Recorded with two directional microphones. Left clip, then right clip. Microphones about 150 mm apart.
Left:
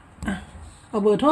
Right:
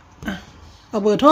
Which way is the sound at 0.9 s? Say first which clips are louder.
Right 2 dB; 25° right (ahead or behind).